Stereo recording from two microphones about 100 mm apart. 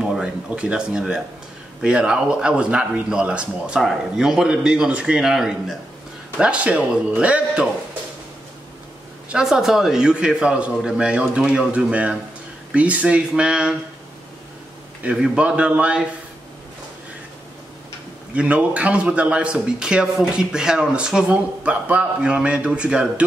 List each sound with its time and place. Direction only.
0.0 s a sound: 5° right (ahead or behind)
0.5 s a man's voice: 10° right (ahead or behind)
9.3 s a man's voice: 5° right (ahead or behind)
15.0 s a man's voice: 10° right (ahead or behind)
18.3 s a man's voice: 15° right (ahead or behind)